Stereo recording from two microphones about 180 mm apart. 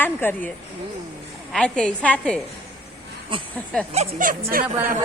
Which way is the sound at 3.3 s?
30° right (ahead or behind).